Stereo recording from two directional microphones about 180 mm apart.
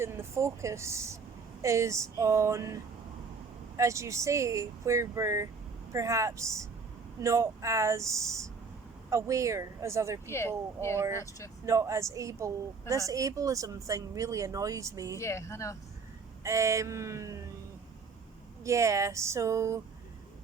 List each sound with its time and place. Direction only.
0.0 s speech: 15° right (ahead or behind)
3.8 s speech: 15° right (ahead or behind)
10.2 s speech: 15° left (ahead or behind)
10.9 s speech: 15° right (ahead or behind)
15.2 s speech: 15° left (ahead or behind)
16.4 s speech: 15° right (ahead or behind)
18.6 s speech: 15° right (ahead or behind)